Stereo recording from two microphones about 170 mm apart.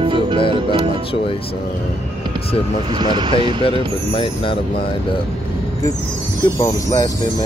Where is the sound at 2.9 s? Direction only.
25° right (ahead or behind).